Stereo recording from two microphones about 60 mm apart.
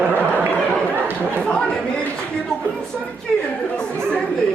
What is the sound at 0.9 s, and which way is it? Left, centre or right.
Chatter, right.